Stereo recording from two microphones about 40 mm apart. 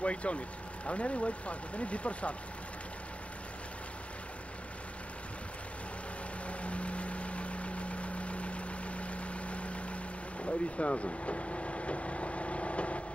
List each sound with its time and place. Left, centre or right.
0.0 s speech: left
6.4 s vehicle: left
10.4 s speech: left